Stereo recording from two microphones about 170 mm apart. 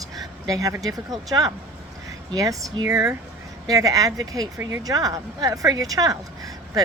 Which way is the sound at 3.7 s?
20° right (ahead or behind).